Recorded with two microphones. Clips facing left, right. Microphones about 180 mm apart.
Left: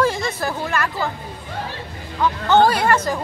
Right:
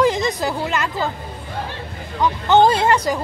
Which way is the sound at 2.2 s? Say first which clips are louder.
Right 1 dB; 20° right (ahead or behind).